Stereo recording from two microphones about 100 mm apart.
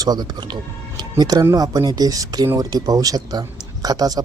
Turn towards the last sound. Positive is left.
turn(degrees=-40)  # may be behind; listen again after turning